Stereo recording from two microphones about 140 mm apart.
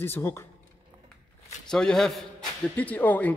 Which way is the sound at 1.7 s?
5° left (ahead or behind).